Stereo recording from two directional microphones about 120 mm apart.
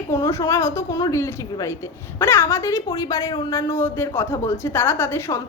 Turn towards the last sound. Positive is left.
turn(degrees=20)  # may be behind; listen again after turning